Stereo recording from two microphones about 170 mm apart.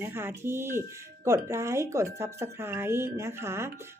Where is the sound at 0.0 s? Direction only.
15° right (ahead or behind).